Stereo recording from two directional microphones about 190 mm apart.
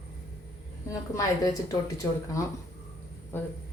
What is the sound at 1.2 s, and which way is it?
Speech, 20° left (ahead or behind).